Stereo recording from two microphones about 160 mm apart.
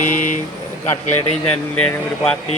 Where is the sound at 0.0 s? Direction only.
50° left (ahead or behind).